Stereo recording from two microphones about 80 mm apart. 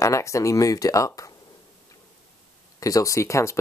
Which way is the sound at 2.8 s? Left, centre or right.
Left.